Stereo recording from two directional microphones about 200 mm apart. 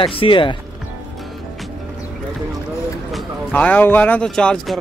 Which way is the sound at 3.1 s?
5° left (ahead or behind).